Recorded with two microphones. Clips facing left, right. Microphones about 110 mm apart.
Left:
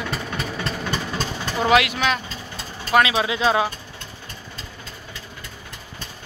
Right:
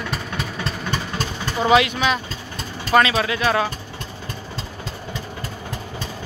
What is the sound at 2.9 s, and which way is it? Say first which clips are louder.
Speech: right 1 dB; 10° left (ahead or behind).